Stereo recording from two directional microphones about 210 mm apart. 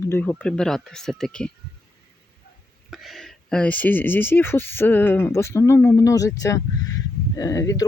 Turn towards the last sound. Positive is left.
turn(degrees=15)  # may be behind; listen again after turning